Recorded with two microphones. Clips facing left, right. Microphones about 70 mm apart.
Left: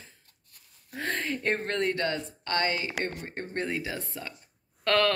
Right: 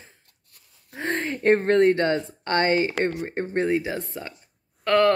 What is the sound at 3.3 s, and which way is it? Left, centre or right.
A woman's voice, right.